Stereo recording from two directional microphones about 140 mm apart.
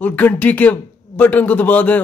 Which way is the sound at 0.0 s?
10° left (ahead or behind).